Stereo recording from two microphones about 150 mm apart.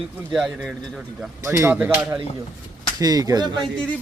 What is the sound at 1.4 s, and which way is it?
Speech, 15° right (ahead or behind).